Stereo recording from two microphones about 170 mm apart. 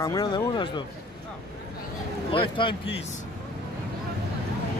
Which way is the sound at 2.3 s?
30° left (ahead or behind).